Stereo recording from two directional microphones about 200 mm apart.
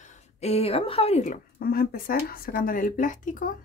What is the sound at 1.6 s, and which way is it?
Speech, 50° left (ahead or behind).